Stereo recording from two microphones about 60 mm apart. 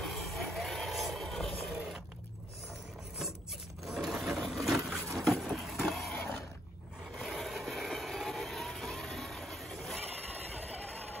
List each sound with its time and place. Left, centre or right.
0.0 s vehicle: centre
3.8 s wood: centre
5.1 s vehicle: centre
6.1 s a sound: left
7.2 s train: centre